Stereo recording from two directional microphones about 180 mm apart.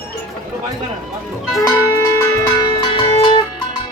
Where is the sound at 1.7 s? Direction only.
20° left (ahead or behind).